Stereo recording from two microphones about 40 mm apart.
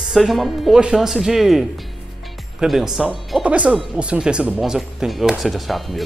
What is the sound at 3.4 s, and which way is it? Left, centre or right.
Speech, right.